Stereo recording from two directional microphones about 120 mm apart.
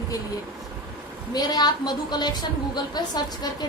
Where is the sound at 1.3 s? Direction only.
35° left (ahead or behind).